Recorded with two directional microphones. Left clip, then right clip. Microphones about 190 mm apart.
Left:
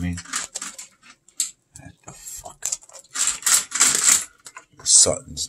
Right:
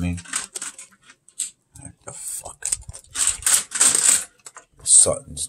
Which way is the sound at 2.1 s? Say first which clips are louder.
Right 3 dB; 30° right (ahead or behind).